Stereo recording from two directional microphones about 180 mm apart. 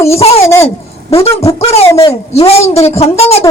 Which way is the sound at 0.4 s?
15° left (ahead or behind).